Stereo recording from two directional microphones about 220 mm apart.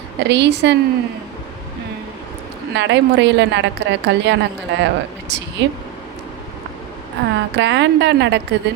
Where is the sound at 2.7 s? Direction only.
50° right (ahead or behind).